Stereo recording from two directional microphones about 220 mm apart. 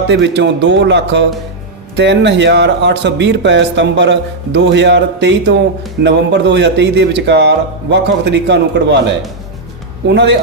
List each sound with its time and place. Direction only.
0.1 s speech: 50° right (ahead or behind)